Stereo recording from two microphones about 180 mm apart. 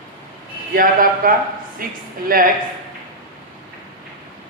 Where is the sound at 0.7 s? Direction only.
50° right (ahead or behind).